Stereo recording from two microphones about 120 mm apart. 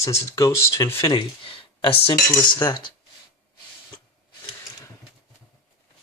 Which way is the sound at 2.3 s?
35° left (ahead or behind).